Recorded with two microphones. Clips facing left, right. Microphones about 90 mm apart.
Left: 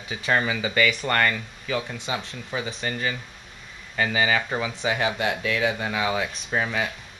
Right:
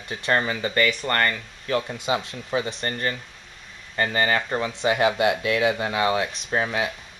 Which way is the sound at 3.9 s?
5° left (ahead or behind).